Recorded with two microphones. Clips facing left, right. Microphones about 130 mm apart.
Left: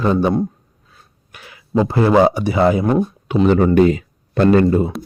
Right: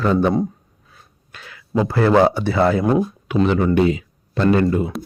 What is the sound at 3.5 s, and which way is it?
Speech, 45° left (ahead or behind).